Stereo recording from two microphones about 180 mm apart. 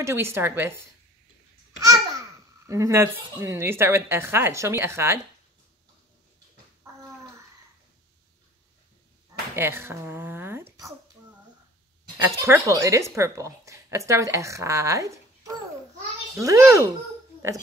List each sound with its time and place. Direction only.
0.0 s a woman's voice: 15° right (ahead or behind)
1.8 s babbling: 20° right (ahead or behind)
3.3 s a woman's voice: 15° right (ahead or behind)
9.6 s a sound: 15° right (ahead or behind)
12.4 s a woman's voice: 15° right (ahead or behind)